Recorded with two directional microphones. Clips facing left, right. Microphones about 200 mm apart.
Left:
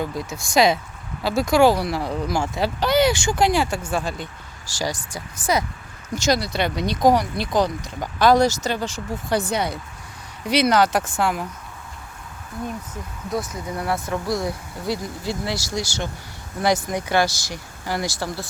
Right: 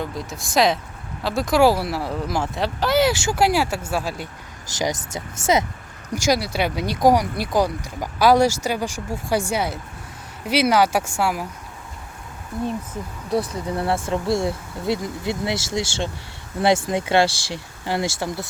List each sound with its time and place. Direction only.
0.0 s speech: centre (ahead or behind)
4.7 s speech: 20° right (ahead or behind)
6.1 s speech: 10° right (ahead or behind)
13.3 s speech: 30° right (ahead or behind)